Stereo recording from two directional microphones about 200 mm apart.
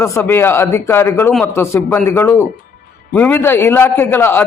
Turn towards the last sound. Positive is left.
turn(degrees=10)  # may be behind; listen again after turning